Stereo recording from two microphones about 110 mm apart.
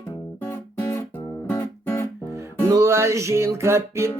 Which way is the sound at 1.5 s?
20° left (ahead or behind).